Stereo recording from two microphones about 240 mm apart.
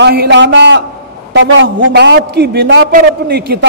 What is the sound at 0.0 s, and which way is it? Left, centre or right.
A man's voice, right.